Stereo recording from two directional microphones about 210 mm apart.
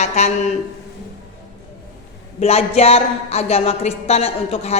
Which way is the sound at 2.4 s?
30° left (ahead or behind).